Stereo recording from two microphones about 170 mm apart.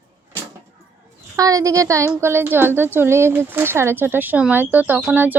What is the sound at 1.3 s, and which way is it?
Speech, 20° right (ahead or behind).